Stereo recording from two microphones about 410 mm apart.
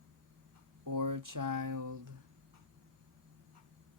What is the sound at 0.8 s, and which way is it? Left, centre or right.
Speech, right.